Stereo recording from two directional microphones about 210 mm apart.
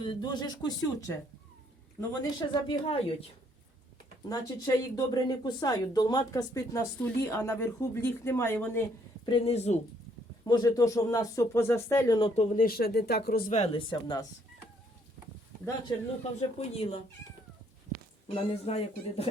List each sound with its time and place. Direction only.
0.0 s speech: 20° left (ahead or behind)
4.3 s speech: 15° left (ahead or behind)
9.2 s speech: 25° left (ahead or behind)
10.4 s speech: 20° left (ahead or behind)
12.4 s speech: 40° left (ahead or behind)
13.5 s speech: 35° left (ahead or behind)
13.9 s speech: 20° left (ahead or behind)
15.9 s speech: 20° left (ahead or behind)
18.6 s speech: 30° left (ahead or behind)